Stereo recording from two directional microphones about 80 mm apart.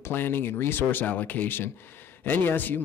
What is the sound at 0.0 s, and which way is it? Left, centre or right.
Speech, left.